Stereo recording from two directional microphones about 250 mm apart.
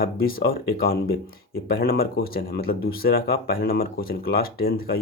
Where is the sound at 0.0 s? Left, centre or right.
Left.